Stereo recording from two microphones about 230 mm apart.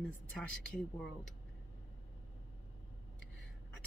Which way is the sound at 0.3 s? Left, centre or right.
Centre.